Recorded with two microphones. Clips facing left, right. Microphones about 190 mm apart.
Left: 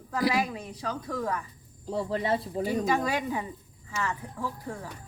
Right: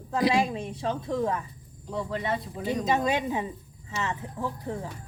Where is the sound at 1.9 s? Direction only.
30° left (ahead or behind).